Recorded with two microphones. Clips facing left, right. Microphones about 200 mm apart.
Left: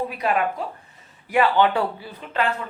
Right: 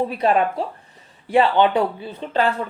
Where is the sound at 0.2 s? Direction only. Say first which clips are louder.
Right 3 dB; 30° right (ahead or behind).